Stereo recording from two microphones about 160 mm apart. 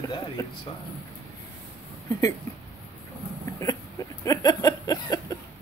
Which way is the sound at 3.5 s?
20° left (ahead or behind).